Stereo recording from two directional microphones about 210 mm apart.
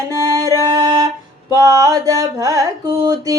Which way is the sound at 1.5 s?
15° right (ahead or behind).